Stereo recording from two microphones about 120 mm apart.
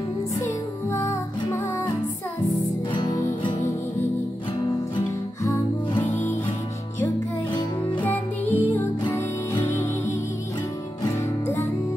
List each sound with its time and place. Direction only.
0.8 s music: 20° left (ahead or behind)
2.9 s music: 35° left (ahead or behind)
8.0 s music: 15° left (ahead or behind)
11.1 s music: 25° left (ahead or behind)